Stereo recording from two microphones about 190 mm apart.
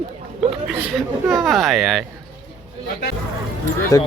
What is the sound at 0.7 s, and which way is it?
Speech, centre (ahead or behind).